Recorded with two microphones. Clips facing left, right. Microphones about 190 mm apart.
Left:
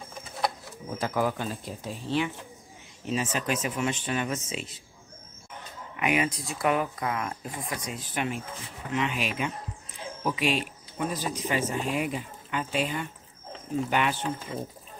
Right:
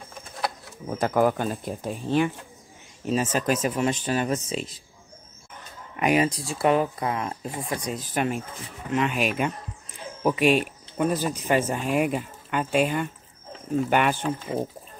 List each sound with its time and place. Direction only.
0.8 s speech: 50° right (ahead or behind); by 4.7 s 35° right (ahead or behind)
5.9 s speech: 40° right (ahead or behind)